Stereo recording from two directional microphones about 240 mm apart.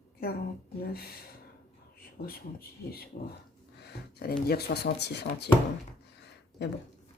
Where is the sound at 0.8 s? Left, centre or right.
Left.